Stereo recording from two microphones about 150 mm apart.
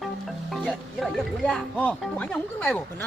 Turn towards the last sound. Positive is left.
turn(degrees=10)  # may be behind; listen again after turning